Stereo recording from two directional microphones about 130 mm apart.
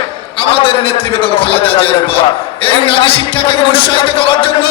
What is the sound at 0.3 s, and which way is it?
A man's voice, 45° left (ahead or behind).